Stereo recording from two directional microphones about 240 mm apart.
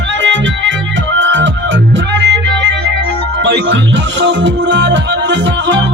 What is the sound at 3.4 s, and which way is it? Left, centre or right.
Music, right.